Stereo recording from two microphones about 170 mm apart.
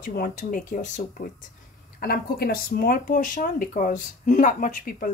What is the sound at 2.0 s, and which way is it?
Speech, 65° left (ahead or behind).